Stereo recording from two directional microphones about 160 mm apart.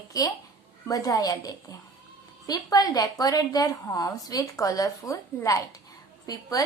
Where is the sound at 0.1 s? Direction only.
20° left (ahead or behind).